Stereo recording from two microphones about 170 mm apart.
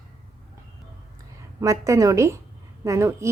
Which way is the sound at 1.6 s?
20° right (ahead or behind).